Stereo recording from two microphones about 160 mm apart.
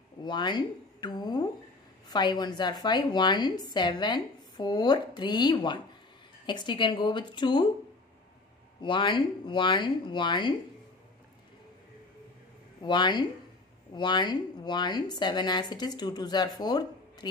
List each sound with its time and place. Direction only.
0.2 s a sound: 30° left (ahead or behind)
2.0 s a woman's voice: 25° left (ahead or behind)
8.8 s a woman's voice: 30° left (ahead or behind)
12.8 s a woman's voice: 30° left (ahead or behind)